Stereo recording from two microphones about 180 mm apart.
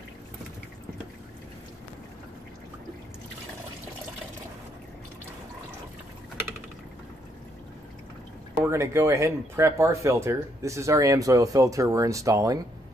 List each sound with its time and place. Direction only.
8.5 s speech: 15° right (ahead or behind)